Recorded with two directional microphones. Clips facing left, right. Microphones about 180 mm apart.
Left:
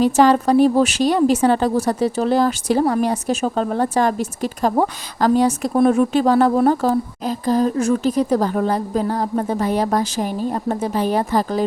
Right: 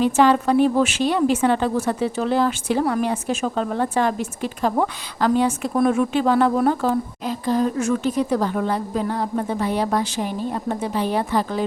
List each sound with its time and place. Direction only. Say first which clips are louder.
0.0 s a woman's voice: left 3 dB; 40° left (ahead or behind)